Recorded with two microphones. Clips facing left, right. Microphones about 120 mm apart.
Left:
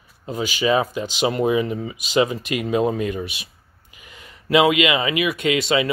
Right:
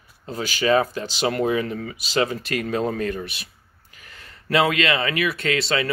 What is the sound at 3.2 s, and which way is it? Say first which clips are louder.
Speech: left 3 dB; 40° right (ahead or behind).